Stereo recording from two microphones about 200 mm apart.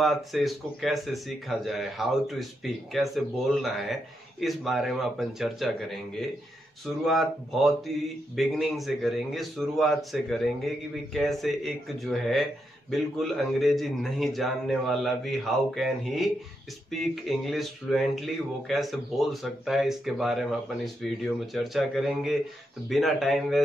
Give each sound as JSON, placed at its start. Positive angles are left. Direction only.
{"t": 0.0, "sound": "a man's voice", "side_deg": 0}